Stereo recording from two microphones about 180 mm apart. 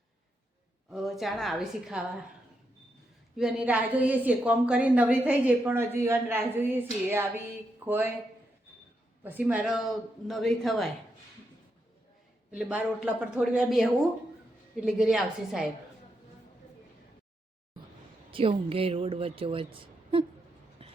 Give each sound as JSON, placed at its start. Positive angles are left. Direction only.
{"t": 0.9, "sound": "speech", "side_deg": 0}
{"t": 3.3, "sound": "a woman's voice", "side_deg": -5}
{"t": 9.2, "sound": "speech", "side_deg": -10}
{"t": 12.5, "sound": "a woman's voice", "side_deg": -5}
{"t": 18.3, "sound": "speech", "side_deg": -30}
{"t": 20.8, "sound": "a sound", "side_deg": -35}